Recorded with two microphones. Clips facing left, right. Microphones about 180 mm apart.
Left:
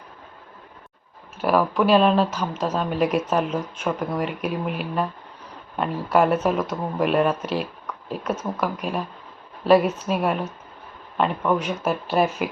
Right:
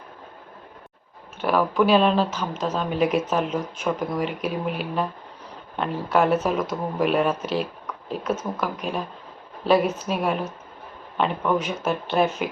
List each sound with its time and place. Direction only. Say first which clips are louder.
1.4 s speech: left 1 dB; centre (ahead or behind)